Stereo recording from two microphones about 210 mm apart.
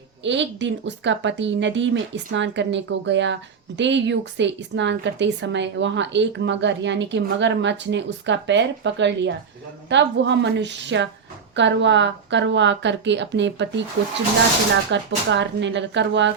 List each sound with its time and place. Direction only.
0.2 s a woman's voice: 60° right (ahead or behind)
14.8 s a woman's voice: 60° right (ahead or behind)